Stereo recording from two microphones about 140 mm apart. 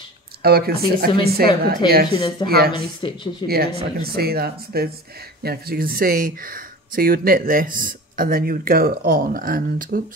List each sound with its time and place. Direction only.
0.4 s speech: 90° right
1.8 s speech: 30° left (ahead or behind)
2.4 s speech: 90° right
2.7 s speech: 35° left (ahead or behind)
3.4 s speech: 90° right